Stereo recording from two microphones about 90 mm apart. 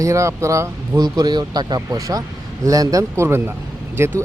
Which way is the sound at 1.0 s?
50° right (ahead or behind).